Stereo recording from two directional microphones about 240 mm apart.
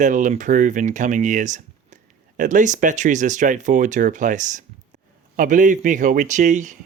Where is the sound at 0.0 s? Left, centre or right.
Right.